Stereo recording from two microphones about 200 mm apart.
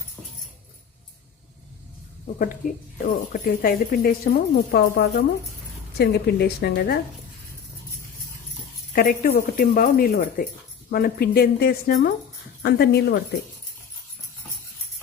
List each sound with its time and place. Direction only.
3.3 s speech: 45° left (ahead or behind)
9.0 s speech: 45° left (ahead or behind)